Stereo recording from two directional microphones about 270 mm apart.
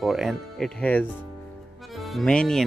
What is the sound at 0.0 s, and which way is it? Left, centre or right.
Speech, centre.